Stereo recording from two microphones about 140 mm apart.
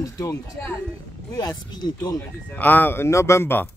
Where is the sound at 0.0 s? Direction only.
25° left (ahead or behind).